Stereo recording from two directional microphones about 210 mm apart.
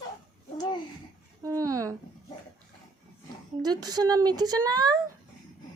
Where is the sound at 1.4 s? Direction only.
15° right (ahead or behind).